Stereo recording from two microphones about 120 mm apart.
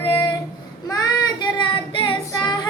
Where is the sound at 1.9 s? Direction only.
45° left (ahead or behind).